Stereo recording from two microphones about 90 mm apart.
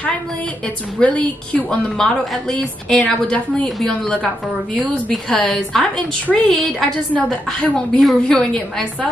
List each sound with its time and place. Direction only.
0.9 s a woman's voice: 15° left (ahead or behind)
7.2 s a woman's voice: 15° left (ahead or behind)
7.7 s a woman's voice: 5° left (ahead or behind)